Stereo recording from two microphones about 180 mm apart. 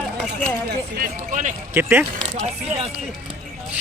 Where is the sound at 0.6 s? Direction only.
50° right (ahead or behind).